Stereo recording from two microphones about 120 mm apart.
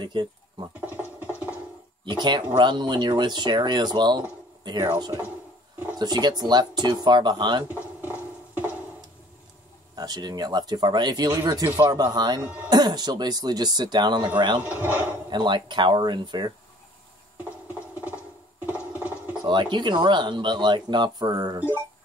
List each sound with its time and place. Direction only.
0.0 s speech: 40° right (ahead or behind)
0.7 s a sound: 10° right (ahead or behind)
2.0 s speech: 40° right (ahead or behind)
7.7 s a sound: 10° right (ahead or behind)
9.9 s speech: 35° right (ahead or behind)
14.6 s speech: 15° right (ahead or behind)
15.2 s speech: 40° right (ahead or behind)
17.5 s a sound: 10° right (ahead or behind)
19.4 s speech: 40° right (ahead or behind)